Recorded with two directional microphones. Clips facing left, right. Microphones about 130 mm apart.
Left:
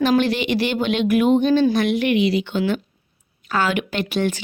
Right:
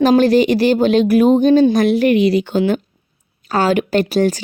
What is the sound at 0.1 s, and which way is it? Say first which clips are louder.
Speech: right 7 dB; 40° right (ahead or behind).